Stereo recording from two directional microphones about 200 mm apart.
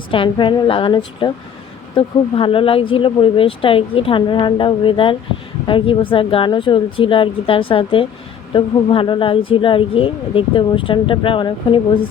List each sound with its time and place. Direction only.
0.1 s speech: 25° left (ahead or behind)